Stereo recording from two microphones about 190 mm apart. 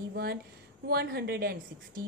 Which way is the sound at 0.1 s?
55° right (ahead or behind).